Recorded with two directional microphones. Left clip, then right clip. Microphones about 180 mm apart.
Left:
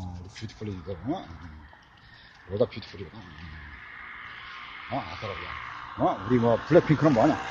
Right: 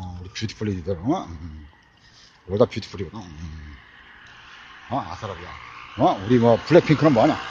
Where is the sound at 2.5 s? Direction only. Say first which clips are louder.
Right 7 dB; 50° right (ahead or behind).